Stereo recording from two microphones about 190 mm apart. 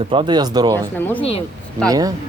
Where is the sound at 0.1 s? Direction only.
25° right (ahead or behind).